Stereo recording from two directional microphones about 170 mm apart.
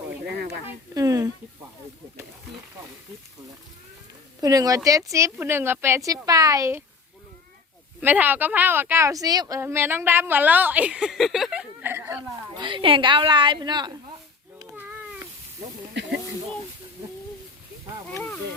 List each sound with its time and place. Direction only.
0.9 s speech: 20° right (ahead or behind)
4.4 s speech: 20° right (ahead or behind)
8.0 s speech: 10° right (ahead or behind)
12.5 s speech: 30° right (ahead or behind)
14.7 s a sound: 10° right (ahead or behind)
16.0 s speech: 90° right